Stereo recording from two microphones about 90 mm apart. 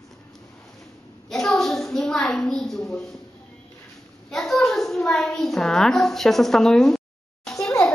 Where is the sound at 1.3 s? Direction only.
5° left (ahead or behind).